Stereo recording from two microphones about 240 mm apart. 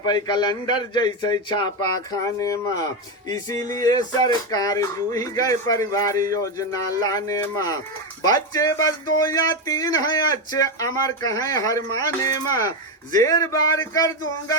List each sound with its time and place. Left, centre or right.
0.0 s speech: centre